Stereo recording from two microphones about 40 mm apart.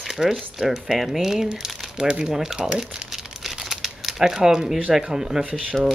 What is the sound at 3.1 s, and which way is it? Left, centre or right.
Crumpling, centre.